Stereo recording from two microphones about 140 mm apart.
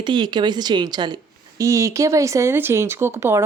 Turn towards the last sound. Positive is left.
turn(degrees=-15)  # may be behind; listen again after turning